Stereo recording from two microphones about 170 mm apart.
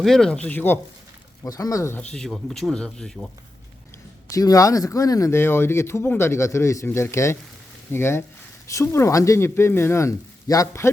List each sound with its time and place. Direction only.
0.0 s speech: centre (ahead or behind)
4.3 s speech: 20° left (ahead or behind)